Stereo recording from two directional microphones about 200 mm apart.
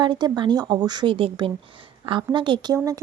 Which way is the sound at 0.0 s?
20° right (ahead or behind).